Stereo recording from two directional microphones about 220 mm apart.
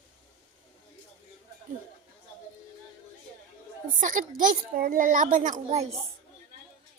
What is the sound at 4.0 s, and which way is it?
A woman's voice, 35° right (ahead or behind).